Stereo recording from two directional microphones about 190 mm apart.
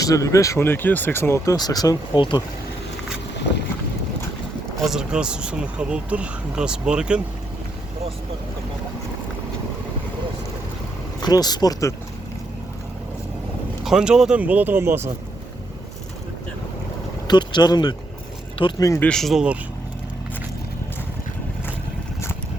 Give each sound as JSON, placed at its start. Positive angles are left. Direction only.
{"t": 0.0, "sound": "speech", "side_deg": 15}
{"t": 4.8, "sound": "speech", "side_deg": -5}
{"t": 11.2, "sound": "speech", "side_deg": 20}
{"t": 13.8, "sound": "speech", "side_deg": -5}
{"t": 17.2, "sound": "speech", "side_deg": 20}
{"t": 19.0, "sound": "speech", "side_deg": 0}